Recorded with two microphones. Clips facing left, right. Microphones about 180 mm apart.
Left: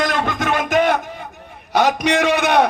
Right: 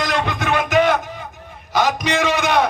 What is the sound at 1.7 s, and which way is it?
Speech, 60° left (ahead or behind).